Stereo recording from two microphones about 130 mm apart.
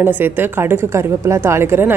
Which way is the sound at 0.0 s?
15° right (ahead or behind).